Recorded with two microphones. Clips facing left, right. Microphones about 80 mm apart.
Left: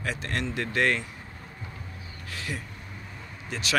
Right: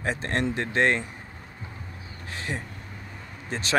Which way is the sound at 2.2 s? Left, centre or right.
Right.